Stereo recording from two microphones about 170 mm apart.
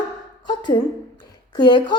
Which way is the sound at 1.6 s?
25° left (ahead or behind).